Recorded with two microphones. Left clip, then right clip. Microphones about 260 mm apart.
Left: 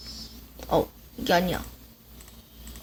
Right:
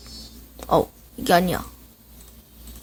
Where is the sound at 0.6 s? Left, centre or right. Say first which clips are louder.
Right 5 dB; right.